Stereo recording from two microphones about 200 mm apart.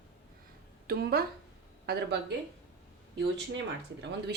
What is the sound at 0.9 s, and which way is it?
Speech, 50° right (ahead or behind).